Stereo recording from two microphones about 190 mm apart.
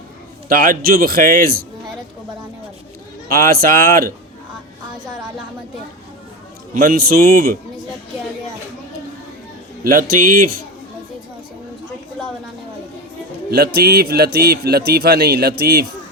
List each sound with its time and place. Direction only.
0.4 s a man's voice: 50° right (ahead or behind)
3.2 s a man's voice: 50° right (ahead or behind)
6.7 s a man's voice: 50° right (ahead or behind)
9.8 s a man's voice: 50° right (ahead or behind)
13.5 s a man's voice: 55° right (ahead or behind)